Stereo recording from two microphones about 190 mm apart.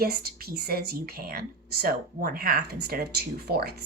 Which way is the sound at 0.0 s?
55° right (ahead or behind).